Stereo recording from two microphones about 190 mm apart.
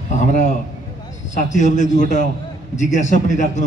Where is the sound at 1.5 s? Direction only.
40° left (ahead or behind).